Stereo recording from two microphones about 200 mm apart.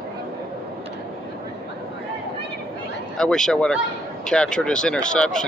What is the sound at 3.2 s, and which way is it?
Speech, 5° left (ahead or behind).